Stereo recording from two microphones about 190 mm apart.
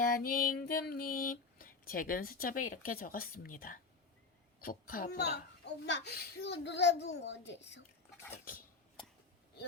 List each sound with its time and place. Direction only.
0.0 s music: 50° left (ahead or behind)
4.6 s a child's voice: 50° left (ahead or behind); by 7.8 s 65° left (ahead or behind)